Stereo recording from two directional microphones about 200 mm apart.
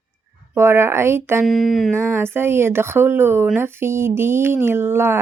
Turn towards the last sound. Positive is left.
turn(degrees=-10)  # may be behind; listen again after turning